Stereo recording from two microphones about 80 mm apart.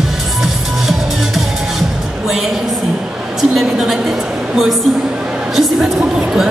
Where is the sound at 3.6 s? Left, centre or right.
Centre.